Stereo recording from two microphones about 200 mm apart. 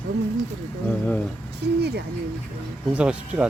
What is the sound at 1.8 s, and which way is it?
Speech, 55° right (ahead or behind).